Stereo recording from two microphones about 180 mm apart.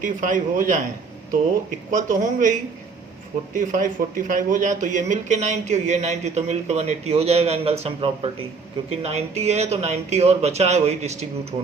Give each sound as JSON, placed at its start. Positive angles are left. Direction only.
{"t": 0.0, "sound": "speech", "side_deg": -45}
{"t": 1.9, "sound": "speech", "side_deg": -45}